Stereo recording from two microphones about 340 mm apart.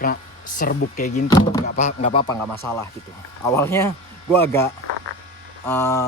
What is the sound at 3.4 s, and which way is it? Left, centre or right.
Speech, centre.